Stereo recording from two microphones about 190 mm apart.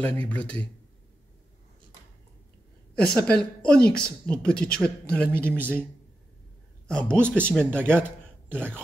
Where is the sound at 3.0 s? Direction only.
5° left (ahead or behind).